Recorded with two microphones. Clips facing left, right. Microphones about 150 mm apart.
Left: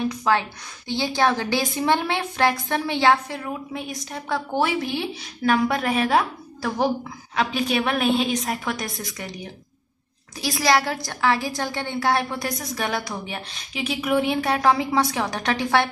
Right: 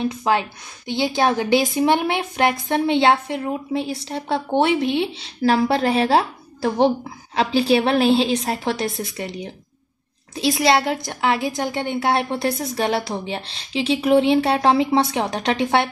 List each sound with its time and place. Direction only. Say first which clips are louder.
0.1 s a woman's voice: right 2 dB; 20° right (ahead or behind)